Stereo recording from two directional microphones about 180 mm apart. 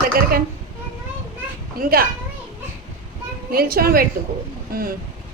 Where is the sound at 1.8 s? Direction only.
50° right (ahead or behind).